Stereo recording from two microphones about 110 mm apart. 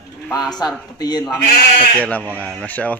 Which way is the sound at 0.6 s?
40° left (ahead or behind).